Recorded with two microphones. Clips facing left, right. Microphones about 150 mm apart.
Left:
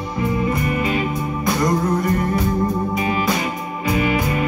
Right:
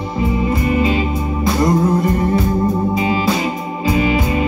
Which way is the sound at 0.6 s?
25° right (ahead or behind).